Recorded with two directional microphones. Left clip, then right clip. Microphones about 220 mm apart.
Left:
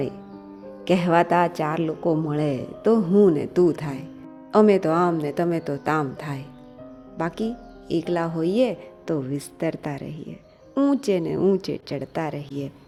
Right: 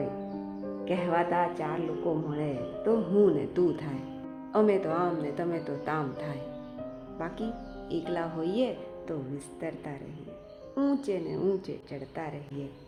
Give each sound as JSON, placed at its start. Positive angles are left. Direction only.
{"t": 0.9, "sound": "speech", "side_deg": 40}